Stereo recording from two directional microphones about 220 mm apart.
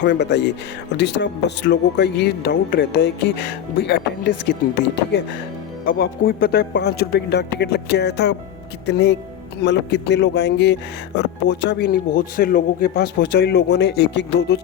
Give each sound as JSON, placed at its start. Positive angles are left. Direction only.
{"t": 0.0, "sound": "a man's voice", "side_deg": 50}